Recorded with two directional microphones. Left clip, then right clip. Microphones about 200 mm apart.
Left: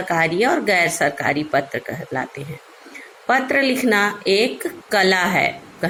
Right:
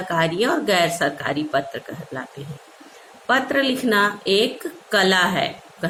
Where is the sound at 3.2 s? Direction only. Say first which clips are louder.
Left 2 dB; 20° left (ahead or behind).